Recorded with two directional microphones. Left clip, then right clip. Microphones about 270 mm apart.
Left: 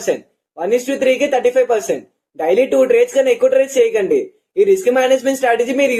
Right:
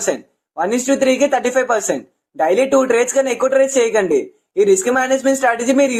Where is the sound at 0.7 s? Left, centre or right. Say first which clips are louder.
Left 2 dB; centre.